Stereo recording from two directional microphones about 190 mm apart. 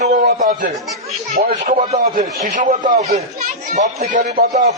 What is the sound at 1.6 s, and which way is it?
Speech, 35° right (ahead or behind).